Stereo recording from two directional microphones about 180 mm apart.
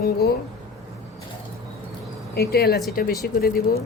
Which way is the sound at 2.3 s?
60° left (ahead or behind).